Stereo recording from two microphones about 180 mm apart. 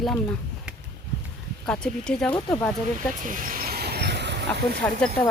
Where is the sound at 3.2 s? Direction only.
50° right (ahead or behind); by 4.8 s 70° right (ahead or behind).